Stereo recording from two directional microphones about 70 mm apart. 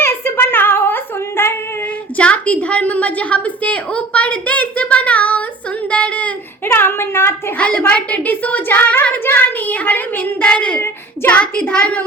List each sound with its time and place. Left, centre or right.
0.0 s child singing: left
2.1 s a woman's voice: centre
6.7 s a sound: left
7.6 s a woman's voice: left